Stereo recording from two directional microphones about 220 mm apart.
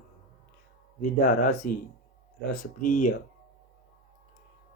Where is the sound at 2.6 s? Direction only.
40° left (ahead or behind).